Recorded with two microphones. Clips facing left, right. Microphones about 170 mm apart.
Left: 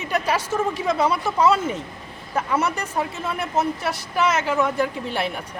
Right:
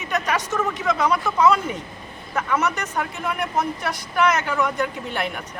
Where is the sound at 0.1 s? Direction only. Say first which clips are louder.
Left 1 dB; 30° left (ahead or behind).